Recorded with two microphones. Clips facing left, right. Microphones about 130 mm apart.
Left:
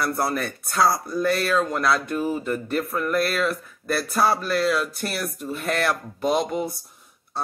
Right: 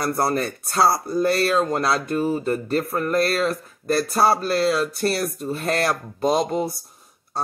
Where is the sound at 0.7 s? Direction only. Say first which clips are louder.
Right 2 dB; 30° right (ahead or behind).